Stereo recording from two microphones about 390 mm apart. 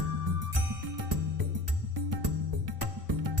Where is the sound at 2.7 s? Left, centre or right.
Right.